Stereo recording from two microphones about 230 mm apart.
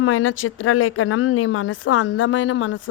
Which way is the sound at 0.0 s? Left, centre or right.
Left.